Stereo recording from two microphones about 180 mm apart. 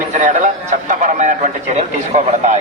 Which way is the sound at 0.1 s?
45° right (ahead or behind).